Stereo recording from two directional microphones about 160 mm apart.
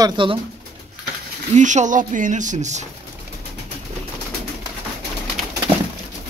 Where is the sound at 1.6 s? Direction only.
50° right (ahead or behind).